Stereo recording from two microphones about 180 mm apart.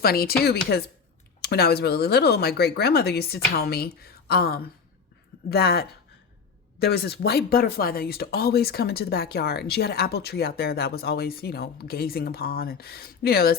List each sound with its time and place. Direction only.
0.0 s speech: 55° left (ahead or behind)
1.4 s speech: 65° left (ahead or behind)